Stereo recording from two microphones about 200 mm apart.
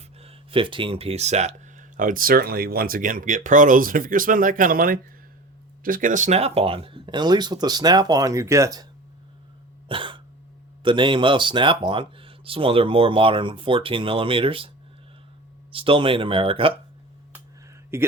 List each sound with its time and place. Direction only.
0.2 s speech: 30° right (ahead or behind)
9.9 s cough: 25° right (ahead or behind)
10.8 s speech: 25° right (ahead or behind)
15.7 s speech: 25° right (ahead or behind)
17.9 s speech: 10° right (ahead or behind)